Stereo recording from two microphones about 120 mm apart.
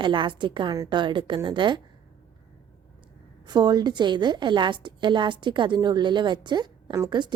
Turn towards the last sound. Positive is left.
turn(degrees=-40)  # may be behind; listen again after turning